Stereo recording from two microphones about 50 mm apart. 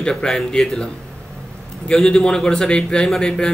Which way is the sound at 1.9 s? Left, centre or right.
Centre.